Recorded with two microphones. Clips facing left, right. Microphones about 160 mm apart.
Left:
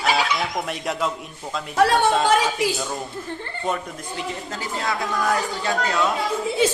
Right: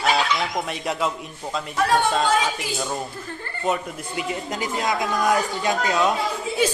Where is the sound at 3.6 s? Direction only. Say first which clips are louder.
Right 3 dB; 10° right (ahead or behind).